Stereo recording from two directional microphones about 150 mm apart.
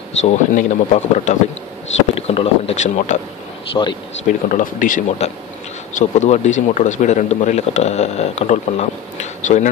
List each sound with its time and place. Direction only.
0.2 s speech: 55° left (ahead or behind)
2.1 s speech: 40° left (ahead or behind)
3.8 s speech: 35° left (ahead or behind)
4.3 s speech: 60° left (ahead or behind)